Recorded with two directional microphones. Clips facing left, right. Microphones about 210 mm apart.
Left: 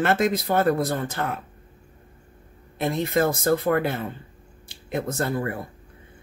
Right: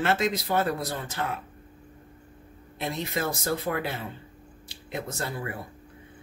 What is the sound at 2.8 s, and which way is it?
Speech, 50° left (ahead or behind).